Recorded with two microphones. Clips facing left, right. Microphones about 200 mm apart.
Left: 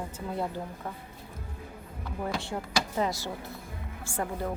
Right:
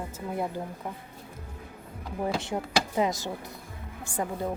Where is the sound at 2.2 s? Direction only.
20° right (ahead or behind).